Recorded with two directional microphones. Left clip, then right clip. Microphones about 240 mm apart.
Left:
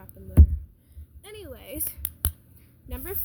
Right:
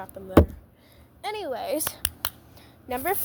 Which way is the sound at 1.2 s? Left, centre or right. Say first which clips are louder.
Right 12 dB; centre.